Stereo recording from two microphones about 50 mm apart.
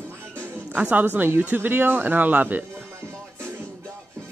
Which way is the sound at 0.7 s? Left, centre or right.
Right.